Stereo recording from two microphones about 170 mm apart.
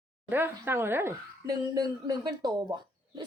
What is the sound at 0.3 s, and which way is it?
A woman's voice, 10° right (ahead or behind).